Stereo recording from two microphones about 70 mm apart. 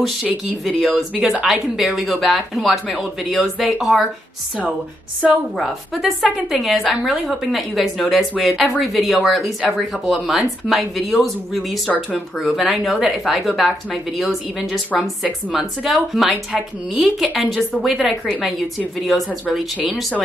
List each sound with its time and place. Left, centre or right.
0.0 s speech: centre
1.1 s speech: centre
5.6 s speech: centre
14.9 s a woman's voice: left
15.5 s speech: centre